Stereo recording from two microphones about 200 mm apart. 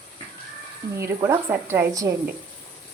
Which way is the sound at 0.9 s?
15° right (ahead or behind).